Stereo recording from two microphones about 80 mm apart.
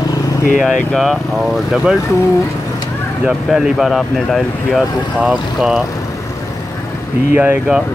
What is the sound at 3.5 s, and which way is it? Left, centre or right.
Speech, centre.